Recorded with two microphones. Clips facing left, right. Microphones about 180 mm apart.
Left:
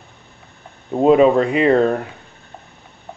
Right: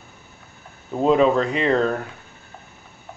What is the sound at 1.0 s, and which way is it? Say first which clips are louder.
Speech: left 5 dB; 10° left (ahead or behind).